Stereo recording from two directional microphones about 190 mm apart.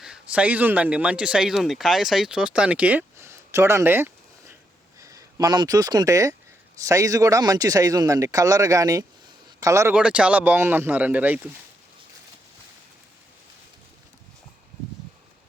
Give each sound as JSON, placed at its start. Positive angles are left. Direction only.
{"t": 0.0, "sound": "a man's voice", "side_deg": -5}